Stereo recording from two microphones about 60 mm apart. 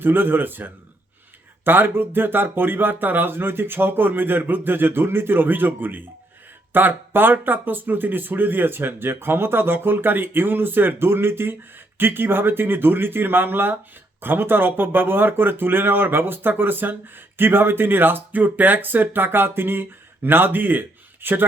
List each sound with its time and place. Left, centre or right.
0.0 s speech: right